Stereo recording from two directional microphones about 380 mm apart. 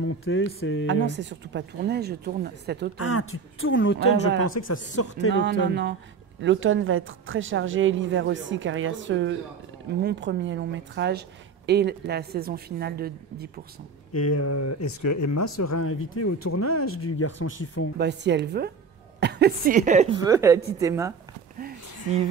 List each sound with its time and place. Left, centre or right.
0.0 s mantra: left
0.6 s speech: left
1.0 s a woman's voice: right
3.1 s speech: left
4.4 s speech: left
5.3 s a woman's voice: right
14.1 s speech: left
17.9 s a woman's voice: right; by 21.1 s centre